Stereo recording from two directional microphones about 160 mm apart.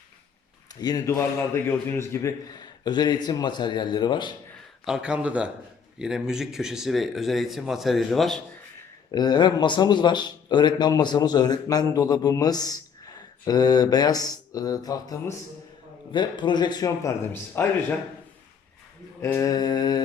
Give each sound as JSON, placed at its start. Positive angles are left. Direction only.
{"t": 0.7, "sound": "speech", "side_deg": 25}
{"t": 4.9, "sound": "speech", "side_deg": -5}
{"t": 9.1, "sound": "speech", "side_deg": 25}
{"t": 19.2, "sound": "speech", "side_deg": 20}